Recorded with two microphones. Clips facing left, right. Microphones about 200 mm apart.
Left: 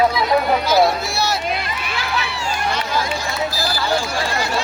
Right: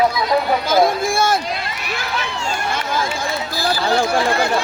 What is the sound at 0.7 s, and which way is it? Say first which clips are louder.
Speech: right 2 dB; 50° right (ahead or behind).